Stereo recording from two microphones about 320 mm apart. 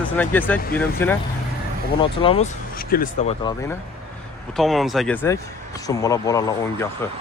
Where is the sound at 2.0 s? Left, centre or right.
Centre.